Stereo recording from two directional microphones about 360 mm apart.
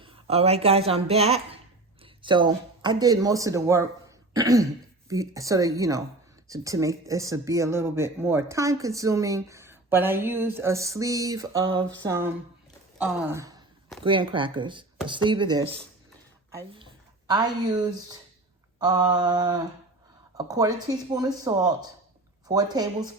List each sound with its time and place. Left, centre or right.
0.0 s a woman's voice: centre